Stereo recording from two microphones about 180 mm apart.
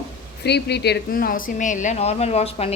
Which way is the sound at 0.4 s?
70° left (ahead or behind).